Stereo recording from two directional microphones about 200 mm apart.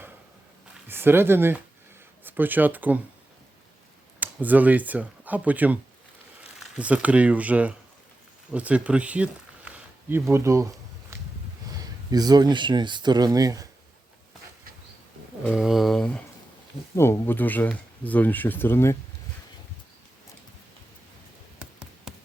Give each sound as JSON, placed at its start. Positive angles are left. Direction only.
{"t": 0.9, "sound": "speech", "side_deg": -10}
{"t": 4.2, "sound": "speech", "side_deg": -10}
{"t": 11.1, "sound": "a sound", "side_deg": -15}
{"t": 11.7, "sound": "speech", "side_deg": -20}
{"t": 15.4, "sound": "speech", "side_deg": 0}
{"t": 21.6, "sound": "a sound", "side_deg": -5}